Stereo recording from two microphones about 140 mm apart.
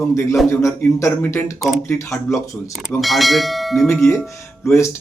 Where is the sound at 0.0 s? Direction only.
20° left (ahead or behind).